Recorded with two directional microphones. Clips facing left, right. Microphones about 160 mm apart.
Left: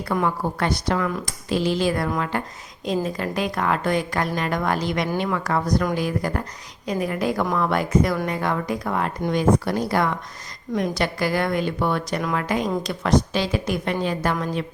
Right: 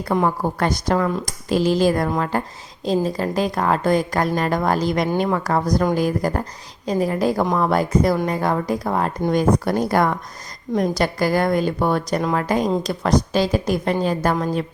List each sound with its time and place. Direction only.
0.3 s a woman's voice: 40° right (ahead or behind)